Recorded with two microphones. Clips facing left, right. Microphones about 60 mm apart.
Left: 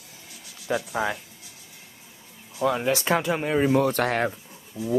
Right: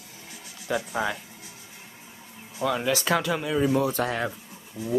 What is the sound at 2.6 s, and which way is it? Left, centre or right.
Speech, left.